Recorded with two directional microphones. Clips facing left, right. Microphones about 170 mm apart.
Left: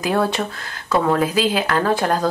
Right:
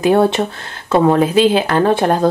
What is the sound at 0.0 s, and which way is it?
Speech, 25° right (ahead or behind).